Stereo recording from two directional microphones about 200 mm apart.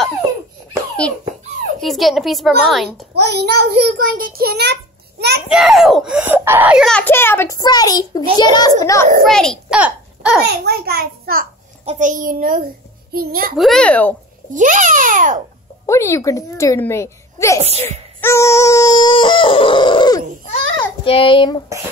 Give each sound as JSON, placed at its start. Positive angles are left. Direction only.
{"t": 1.8, "sound": "a child's voice", "side_deg": 0}
{"t": 3.2, "sound": "a child's voice", "side_deg": -55}
{"t": 5.5, "sound": "a child's voice", "side_deg": 0}
{"t": 6.9, "sound": "a child's voice", "side_deg": 10}
{"t": 9.2, "sound": "a child's voice", "side_deg": 0}
{"t": 10.4, "sound": "a child's voice", "side_deg": -55}
{"t": 11.8, "sound": "a child's voice", "side_deg": -35}
{"t": 13.6, "sound": "a child's voice", "side_deg": 5}
{"t": 14.5, "sound": "a child's voice", "side_deg": -40}
{"t": 15.9, "sound": "a child's voice", "side_deg": 15}
{"t": 17.6, "sound": "a child's voice", "side_deg": -30}
{"t": 17.8, "sound": "a sound", "side_deg": 10}
{"t": 20.7, "sound": "a child's voice", "side_deg": 25}